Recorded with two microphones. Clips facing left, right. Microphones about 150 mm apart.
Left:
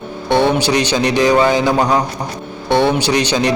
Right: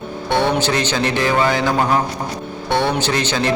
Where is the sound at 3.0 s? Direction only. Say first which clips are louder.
Left 4 dB; 15° left (ahead or behind).